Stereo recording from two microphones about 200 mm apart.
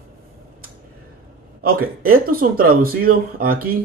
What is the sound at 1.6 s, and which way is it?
Speech, 45° right (ahead or behind).